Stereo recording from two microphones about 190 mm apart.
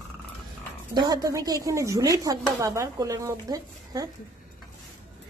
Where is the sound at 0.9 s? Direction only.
20° right (ahead or behind).